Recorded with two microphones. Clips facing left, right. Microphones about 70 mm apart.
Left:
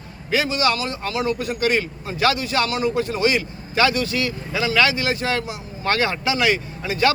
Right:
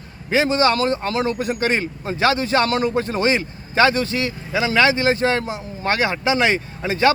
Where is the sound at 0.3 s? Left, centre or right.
Right.